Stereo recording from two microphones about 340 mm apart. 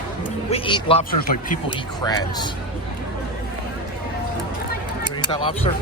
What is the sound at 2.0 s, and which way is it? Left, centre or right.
Speech, centre.